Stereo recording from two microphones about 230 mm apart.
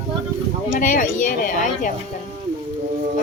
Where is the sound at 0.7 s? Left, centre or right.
Left.